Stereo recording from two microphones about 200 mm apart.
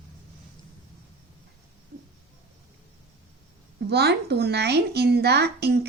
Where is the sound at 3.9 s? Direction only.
55° right (ahead or behind).